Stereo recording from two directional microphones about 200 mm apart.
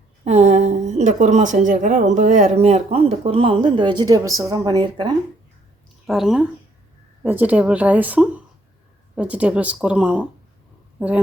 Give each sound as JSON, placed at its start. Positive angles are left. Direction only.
{"t": 0.3, "sound": "a woman's voice", "side_deg": -35}
{"t": 6.1, "sound": "speech", "side_deg": 0}